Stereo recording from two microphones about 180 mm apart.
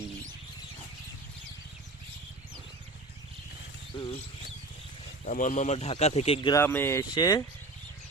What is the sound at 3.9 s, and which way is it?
Speech, 30° left (ahead or behind).